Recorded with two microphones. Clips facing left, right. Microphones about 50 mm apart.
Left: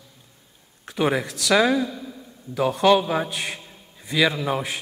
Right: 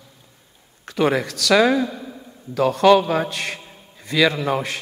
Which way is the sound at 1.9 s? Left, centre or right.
Right.